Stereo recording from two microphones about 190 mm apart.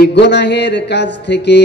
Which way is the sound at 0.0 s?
60° left (ahead or behind).